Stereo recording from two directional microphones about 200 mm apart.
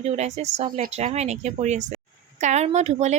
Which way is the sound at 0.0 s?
35° right (ahead or behind).